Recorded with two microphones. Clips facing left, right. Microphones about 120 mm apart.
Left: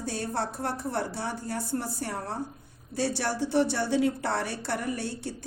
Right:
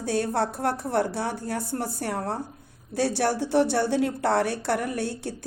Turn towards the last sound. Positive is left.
turn(degrees=-55)  # may be behind; listen again after turning